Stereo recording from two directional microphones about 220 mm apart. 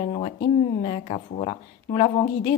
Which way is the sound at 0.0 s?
30° left (ahead or behind).